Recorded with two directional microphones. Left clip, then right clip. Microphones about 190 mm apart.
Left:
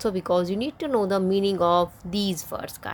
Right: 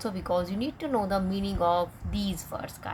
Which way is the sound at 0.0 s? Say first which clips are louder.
Left 6 dB; 45° left (ahead or behind).